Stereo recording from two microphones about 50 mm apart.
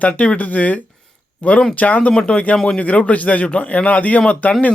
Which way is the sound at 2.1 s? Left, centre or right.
Left.